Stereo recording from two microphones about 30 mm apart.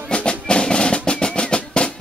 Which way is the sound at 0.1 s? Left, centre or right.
Left.